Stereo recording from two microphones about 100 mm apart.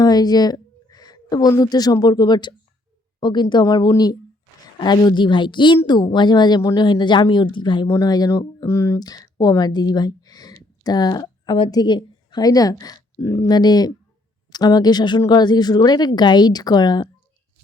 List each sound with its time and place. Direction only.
0.0 s a woman's voice: 40° left (ahead or behind)
6.6 s speech: 30° left (ahead or behind)
6.8 s a woman's voice: 50° left (ahead or behind)
8.0 s a woman's voice: 40° left (ahead or behind)
13.5 s a woman's voice: 45° left (ahead or behind)